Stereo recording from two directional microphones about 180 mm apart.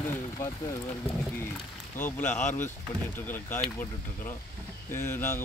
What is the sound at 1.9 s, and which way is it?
Speech, 10° left (ahead or behind).